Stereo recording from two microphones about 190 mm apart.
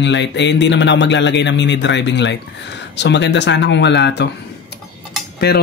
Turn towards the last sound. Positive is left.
turn(degrees=55)  # may be behind; listen again after turning